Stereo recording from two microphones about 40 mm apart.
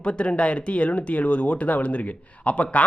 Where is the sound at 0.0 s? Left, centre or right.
Left.